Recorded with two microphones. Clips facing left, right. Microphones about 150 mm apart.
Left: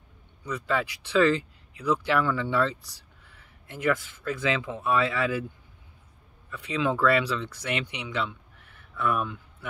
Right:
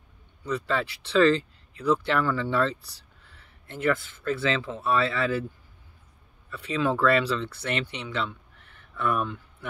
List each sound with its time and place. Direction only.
0.4 s speech: 10° left (ahead or behind)
6.5 s speech: 15° left (ahead or behind)